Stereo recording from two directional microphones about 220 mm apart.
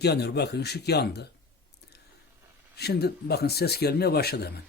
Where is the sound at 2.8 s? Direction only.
45° left (ahead or behind).